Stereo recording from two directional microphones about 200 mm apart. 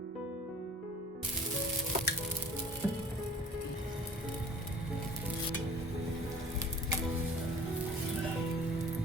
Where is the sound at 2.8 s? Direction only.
10° right (ahead or behind).